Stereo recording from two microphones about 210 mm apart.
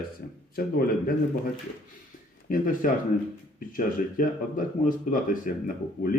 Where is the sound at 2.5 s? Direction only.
40° left (ahead or behind).